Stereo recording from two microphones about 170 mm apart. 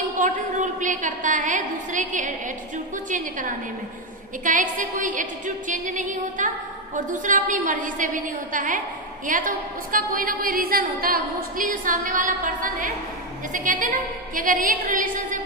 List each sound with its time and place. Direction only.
0.2 s a woman's voice: 50° right (ahead or behind)